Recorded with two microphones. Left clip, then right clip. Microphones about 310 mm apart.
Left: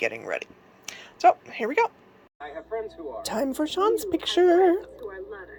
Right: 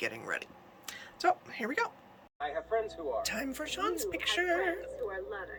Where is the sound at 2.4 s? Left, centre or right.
Right.